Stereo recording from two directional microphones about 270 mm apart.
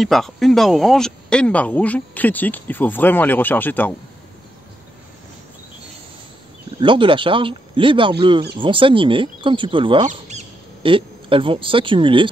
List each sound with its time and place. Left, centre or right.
0.0 s speech: centre
6.8 s speech: centre